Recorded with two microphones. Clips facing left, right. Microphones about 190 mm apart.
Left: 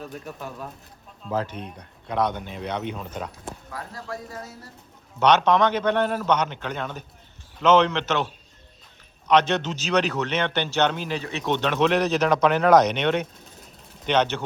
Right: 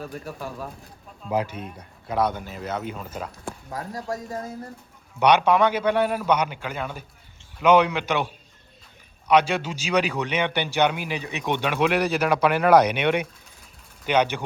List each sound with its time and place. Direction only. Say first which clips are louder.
0.0 s speech: right 2 dB; 5° right (ahead or behind)
3.7 s speech: right 6 dB; 40° right (ahead or behind)
5.2 s speech: even; 10° right (ahead or behind)